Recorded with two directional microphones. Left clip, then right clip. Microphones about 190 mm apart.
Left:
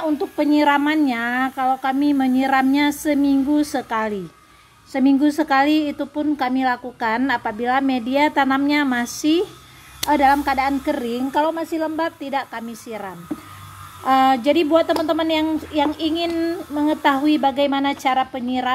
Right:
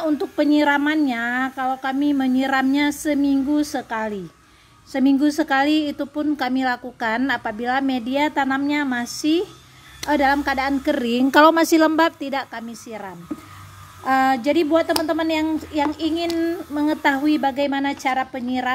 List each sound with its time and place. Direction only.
0.0 s a woman's voice: 20° right (ahead or behind); by 4.2 s 5° left (ahead or behind)
4.9 s a woman's voice: 5° right (ahead or behind)
10.0 s speech: 10° right (ahead or behind)
11.0 s speech: 35° right (ahead or behind)
11.3 s a woman's voice: 50° right (ahead or behind)
12.2 s speech: 15° right (ahead or behind)
12.5 s a woman's voice: centre (ahead or behind)